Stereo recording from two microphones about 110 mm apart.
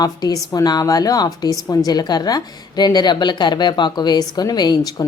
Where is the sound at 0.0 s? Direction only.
35° left (ahead or behind).